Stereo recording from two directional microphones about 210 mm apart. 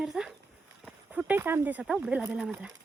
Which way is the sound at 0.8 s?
5° right (ahead or behind).